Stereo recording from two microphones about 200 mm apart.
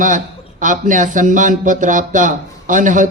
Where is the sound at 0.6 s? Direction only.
40° right (ahead or behind).